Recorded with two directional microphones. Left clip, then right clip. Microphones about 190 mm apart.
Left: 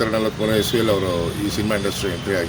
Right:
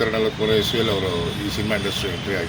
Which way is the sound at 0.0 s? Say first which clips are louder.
Even; 65° left (ahead or behind).